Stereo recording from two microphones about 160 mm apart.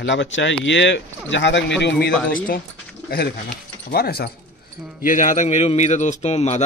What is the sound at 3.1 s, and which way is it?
Speech, 75° left (ahead or behind).